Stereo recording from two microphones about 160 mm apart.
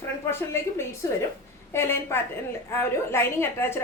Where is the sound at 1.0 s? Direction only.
20° left (ahead or behind).